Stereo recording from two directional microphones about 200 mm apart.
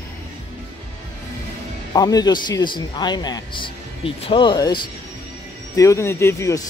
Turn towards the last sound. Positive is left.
turn(degrees=15)  # may be behind; listen again after turning